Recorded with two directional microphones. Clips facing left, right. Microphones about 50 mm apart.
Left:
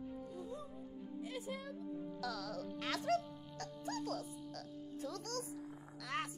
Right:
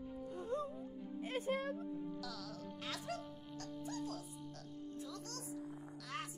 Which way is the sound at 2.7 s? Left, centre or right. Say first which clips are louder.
Left 7 dB; left.